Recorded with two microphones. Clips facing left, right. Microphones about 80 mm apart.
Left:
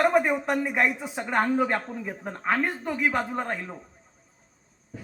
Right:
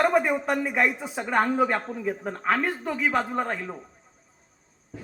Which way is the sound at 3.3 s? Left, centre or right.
Centre.